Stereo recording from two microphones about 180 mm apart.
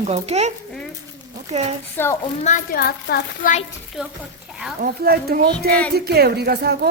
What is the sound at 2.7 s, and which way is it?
Speech, 60° left (ahead or behind).